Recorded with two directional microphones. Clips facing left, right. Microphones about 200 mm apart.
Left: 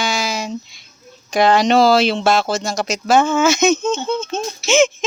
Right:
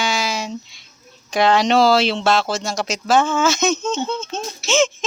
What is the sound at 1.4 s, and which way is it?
Speech, 5° left (ahead or behind).